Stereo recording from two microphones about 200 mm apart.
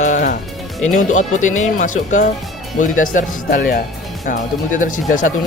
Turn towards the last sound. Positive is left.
turn(degrees=40)  # may be behind; listen again after turning